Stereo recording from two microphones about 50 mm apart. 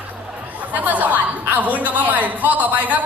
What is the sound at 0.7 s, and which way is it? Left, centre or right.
Speech, right.